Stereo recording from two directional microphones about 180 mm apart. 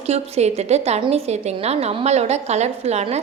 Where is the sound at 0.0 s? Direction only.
35° right (ahead or behind).